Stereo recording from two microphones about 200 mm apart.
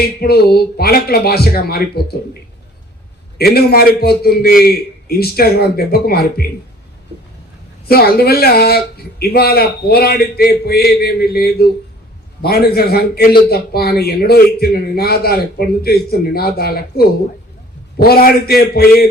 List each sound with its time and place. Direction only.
0.0 s a man's voice: 50° left (ahead or behind)
3.3 s a man's voice: 50° left (ahead or behind)
7.9 s a man's voice: 50° left (ahead or behind)
18.0 s a man's voice: 50° left (ahead or behind)